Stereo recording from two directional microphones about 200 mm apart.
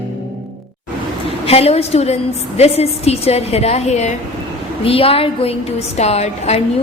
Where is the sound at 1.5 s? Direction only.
30° left (ahead or behind).